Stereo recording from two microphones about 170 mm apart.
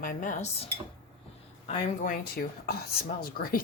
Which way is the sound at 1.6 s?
60° left (ahead or behind).